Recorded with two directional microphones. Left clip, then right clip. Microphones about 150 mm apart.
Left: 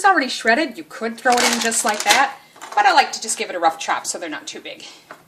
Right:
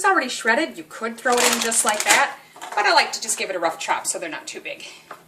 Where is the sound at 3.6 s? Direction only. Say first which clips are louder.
Left 5 dB; 40° left (ahead or behind).